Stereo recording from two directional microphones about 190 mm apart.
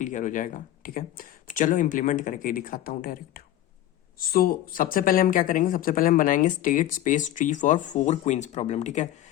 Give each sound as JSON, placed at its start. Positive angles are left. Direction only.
{"t": 0.0, "sound": "speech", "side_deg": 40}